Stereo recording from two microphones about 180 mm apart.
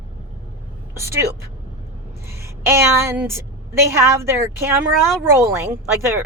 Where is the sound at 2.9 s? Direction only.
10° right (ahead or behind).